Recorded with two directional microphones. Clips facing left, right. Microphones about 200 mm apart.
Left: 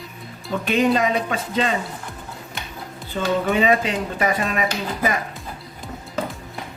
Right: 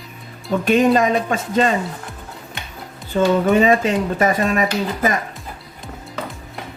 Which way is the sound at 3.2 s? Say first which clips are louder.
Right 6 dB; 45° right (ahead or behind).